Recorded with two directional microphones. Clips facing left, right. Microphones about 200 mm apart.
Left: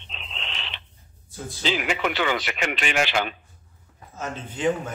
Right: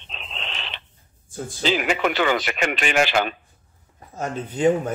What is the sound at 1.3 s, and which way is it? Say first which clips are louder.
Speech: right 4 dB; 45° right (ahead or behind).